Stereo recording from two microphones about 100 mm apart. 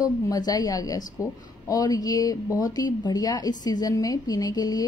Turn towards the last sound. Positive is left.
turn(degrees=40)  # may be behind; listen again after turning